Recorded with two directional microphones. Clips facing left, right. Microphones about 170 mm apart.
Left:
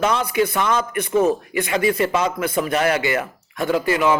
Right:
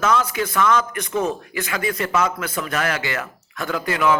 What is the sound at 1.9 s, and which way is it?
Speech, 30° left (ahead or behind).